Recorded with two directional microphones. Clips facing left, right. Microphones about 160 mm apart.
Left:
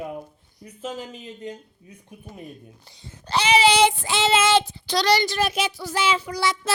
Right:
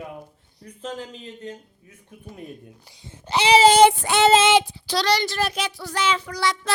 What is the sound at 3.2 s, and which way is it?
Child singing, 20° right (ahead or behind).